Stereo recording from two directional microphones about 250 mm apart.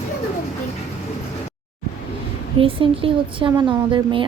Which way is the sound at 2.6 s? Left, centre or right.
Right.